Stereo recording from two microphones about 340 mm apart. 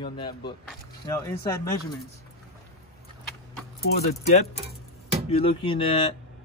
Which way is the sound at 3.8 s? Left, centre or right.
Left.